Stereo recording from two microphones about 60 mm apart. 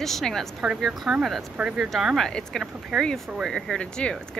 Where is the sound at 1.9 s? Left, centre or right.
Centre.